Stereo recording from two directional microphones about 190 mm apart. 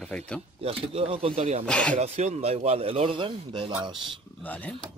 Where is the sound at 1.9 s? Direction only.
35° right (ahead or behind).